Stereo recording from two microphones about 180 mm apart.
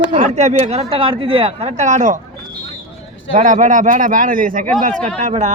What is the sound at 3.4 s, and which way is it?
A man's voice, 40° right (ahead or behind).